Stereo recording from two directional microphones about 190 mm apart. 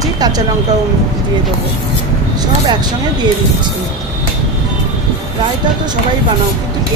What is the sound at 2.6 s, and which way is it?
Speech, 20° right (ahead or behind).